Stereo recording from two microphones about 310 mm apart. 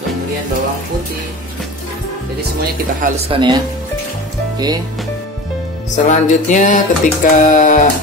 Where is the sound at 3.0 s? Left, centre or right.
Centre.